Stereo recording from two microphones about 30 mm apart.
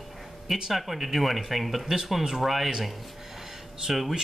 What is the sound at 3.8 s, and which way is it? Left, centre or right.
Speech, centre.